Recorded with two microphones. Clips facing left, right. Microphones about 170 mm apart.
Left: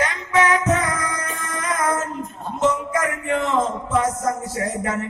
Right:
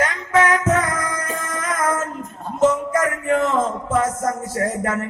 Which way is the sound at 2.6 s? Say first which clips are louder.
Right 3 dB; 45° right (ahead or behind).